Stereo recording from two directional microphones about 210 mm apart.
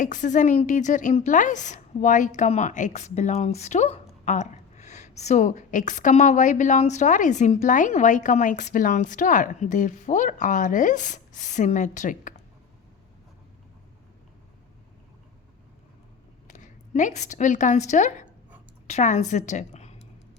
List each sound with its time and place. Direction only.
0.0 s a woman's voice: 35° left (ahead or behind)
16.5 s a woman's voice: 35° left (ahead or behind)